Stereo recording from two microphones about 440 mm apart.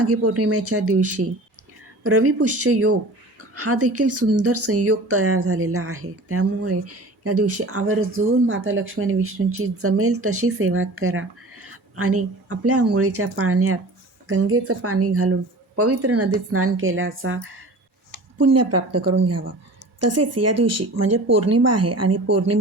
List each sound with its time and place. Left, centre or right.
0.0 s speech: right